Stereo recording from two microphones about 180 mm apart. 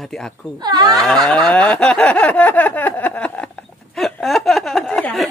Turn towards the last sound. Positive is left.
turn(degrees=5)  # may be behind; listen again after turning